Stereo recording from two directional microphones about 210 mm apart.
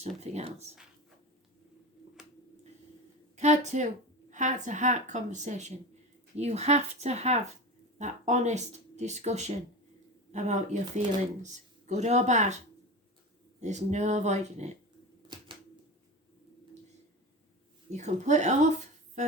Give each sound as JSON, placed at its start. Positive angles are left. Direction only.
{"t": 0.0, "sound": "speech", "side_deg": -30}
{"t": 3.3, "sound": "speech", "side_deg": -35}
{"t": 13.6, "sound": "speech", "side_deg": -35}
{"t": 17.9, "sound": "speech", "side_deg": -35}